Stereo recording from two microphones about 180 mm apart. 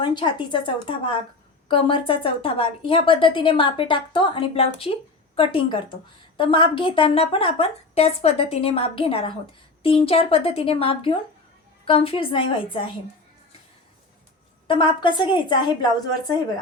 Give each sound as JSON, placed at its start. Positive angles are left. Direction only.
{"t": 0.0, "sound": "a woman's voice", "side_deg": 25}
{"t": 14.7, "sound": "a woman's voice", "side_deg": 25}